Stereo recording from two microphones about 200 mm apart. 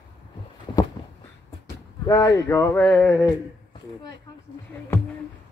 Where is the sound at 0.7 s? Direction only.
20° left (ahead or behind).